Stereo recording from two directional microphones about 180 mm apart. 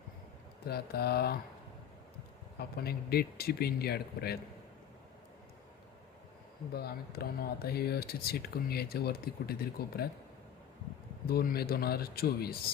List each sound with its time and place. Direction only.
0.7 s speech: 60° left (ahead or behind)
2.6 s speech: 60° left (ahead or behind)
6.7 s speech: 60° left (ahead or behind)
11.3 s speech: 60° left (ahead or behind)